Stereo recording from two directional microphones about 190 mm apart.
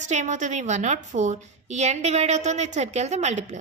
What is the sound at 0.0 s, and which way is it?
A woman's voice, 40° right (ahead or behind).